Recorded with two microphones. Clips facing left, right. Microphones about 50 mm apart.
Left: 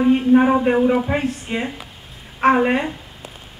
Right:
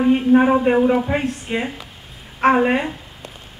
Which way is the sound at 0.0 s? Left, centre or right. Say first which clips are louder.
Even; centre.